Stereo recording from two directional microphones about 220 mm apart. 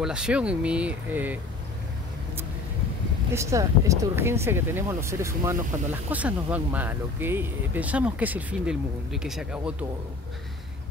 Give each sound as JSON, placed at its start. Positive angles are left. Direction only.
{"t": 0.0, "sound": "speech", "side_deg": -5}
{"t": 3.3, "sound": "speech", "side_deg": -15}